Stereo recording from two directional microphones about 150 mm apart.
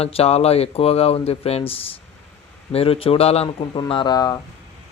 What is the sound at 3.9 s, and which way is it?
Speech, 30° left (ahead or behind).